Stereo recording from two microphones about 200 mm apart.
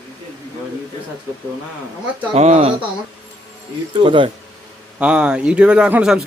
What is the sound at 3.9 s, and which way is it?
Speech, 25° right (ahead or behind).